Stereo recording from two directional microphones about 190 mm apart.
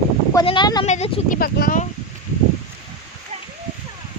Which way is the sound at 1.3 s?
50° left (ahead or behind).